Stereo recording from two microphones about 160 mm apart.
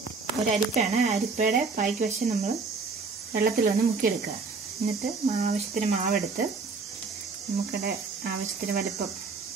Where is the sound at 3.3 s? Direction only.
70° right (ahead or behind).